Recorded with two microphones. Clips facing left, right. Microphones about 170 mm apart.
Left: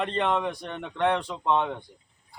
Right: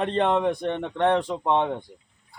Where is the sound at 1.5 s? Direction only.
20° right (ahead or behind).